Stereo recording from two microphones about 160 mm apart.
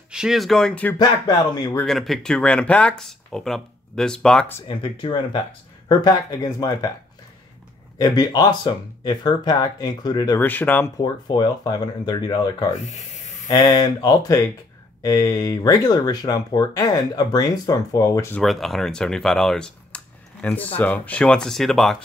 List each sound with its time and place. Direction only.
0.1 s speech: 5° right (ahead or behind)
0.9 s speech: 25° left (ahead or behind)
1.9 s speech: centre (ahead or behind)
4.6 s speech: 30° left (ahead or behind)
8.0 s speech: 25° left (ahead or behind)
10.4 s speech: 10° left (ahead or behind)
11.0 s speech: 25° left (ahead or behind)
12.7 s a sound: 50° left (ahead or behind)
13.5 s speech: 25° left (ahead or behind)
18.4 s speech: centre (ahead or behind)